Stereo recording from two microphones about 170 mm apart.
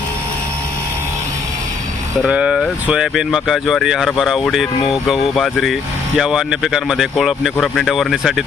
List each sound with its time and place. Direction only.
2.2 s speech: 5° right (ahead or behind)